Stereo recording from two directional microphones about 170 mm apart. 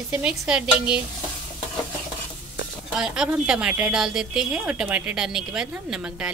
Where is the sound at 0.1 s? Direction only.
5° right (ahead or behind).